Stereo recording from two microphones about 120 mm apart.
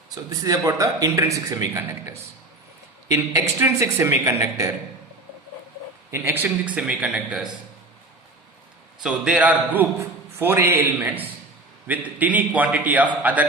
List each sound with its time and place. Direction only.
0.1 s a man's voice: 30° right (ahead or behind)
6.1 s a man's voice: 20° right (ahead or behind)
9.0 s a man's voice: 5° right (ahead or behind)